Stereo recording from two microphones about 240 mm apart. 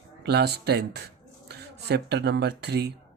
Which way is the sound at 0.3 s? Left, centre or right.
Right.